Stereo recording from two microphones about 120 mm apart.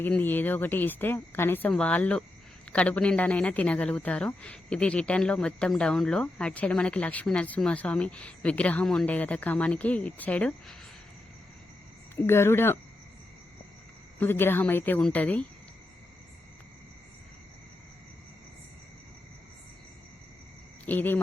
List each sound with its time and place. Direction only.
0.0 s a woman's voice: 15° left (ahead or behind)
12.2 s speech: 20° left (ahead or behind)
14.2 s a woman's voice: 20° left (ahead or behind)
20.8 s speech: 15° left (ahead or behind)